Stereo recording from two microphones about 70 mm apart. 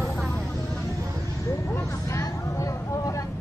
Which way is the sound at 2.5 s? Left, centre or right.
Left.